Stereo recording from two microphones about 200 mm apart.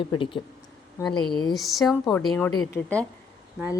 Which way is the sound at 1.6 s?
Centre (ahead or behind).